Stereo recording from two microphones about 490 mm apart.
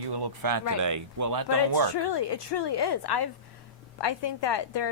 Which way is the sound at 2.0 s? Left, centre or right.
Left.